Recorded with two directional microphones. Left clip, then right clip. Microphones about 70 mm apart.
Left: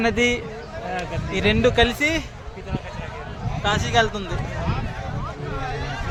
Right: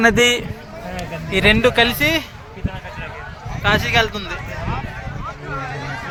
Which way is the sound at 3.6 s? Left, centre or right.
Right.